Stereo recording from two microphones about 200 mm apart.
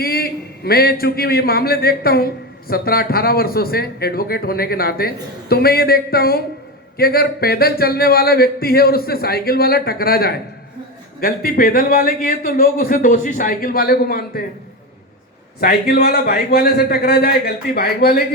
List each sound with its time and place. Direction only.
0.0 s a man's voice: 50° left (ahead or behind)
15.6 s a man's voice: 50° left (ahead or behind)